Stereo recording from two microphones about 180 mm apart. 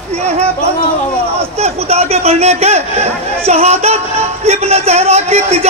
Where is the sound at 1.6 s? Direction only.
35° right (ahead or behind).